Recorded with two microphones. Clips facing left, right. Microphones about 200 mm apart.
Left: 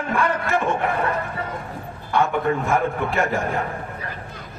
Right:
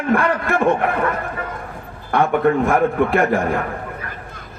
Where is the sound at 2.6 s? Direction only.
55° right (ahead or behind).